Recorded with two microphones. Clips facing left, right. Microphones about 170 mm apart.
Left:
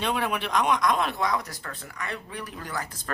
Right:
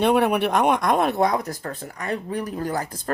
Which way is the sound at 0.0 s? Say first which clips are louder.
Right 9 dB; 60° right (ahead or behind).